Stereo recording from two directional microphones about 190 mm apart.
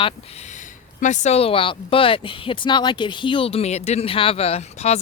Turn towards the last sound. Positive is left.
turn(degrees=35)  # may be behind; listen again after turning